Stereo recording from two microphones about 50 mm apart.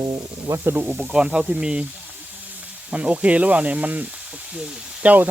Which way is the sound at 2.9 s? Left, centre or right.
Right.